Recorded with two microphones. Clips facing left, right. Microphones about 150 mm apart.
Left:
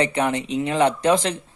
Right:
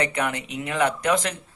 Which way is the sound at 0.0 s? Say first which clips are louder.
Left 4 dB; 30° left (ahead or behind).